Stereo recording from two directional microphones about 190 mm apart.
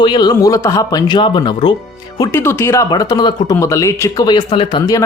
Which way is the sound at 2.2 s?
10° left (ahead or behind).